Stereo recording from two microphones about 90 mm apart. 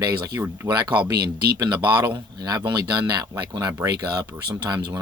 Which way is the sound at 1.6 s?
50° right (ahead or behind).